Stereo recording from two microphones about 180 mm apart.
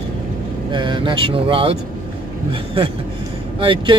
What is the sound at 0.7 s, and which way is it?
Speech, 25° right (ahead or behind).